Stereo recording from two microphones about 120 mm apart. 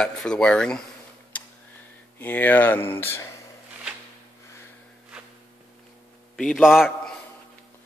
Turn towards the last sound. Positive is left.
turn(degrees=-5)  # may be behind; listen again after turning